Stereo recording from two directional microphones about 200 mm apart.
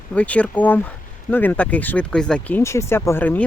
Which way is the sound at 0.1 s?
5° left (ahead or behind).